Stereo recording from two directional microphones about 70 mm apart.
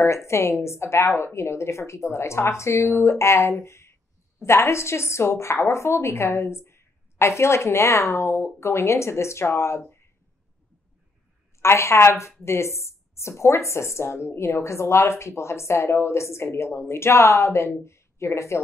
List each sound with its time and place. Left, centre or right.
0.0 s a woman's voice: left
11.6 s a woman's voice: left